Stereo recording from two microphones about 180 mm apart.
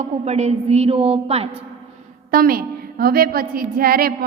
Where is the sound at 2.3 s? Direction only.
55° right (ahead or behind).